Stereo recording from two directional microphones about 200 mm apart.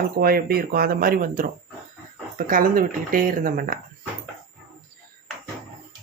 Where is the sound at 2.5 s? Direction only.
45° right (ahead or behind).